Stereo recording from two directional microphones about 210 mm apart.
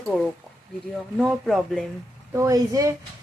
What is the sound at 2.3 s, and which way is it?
Speech, 15° right (ahead or behind).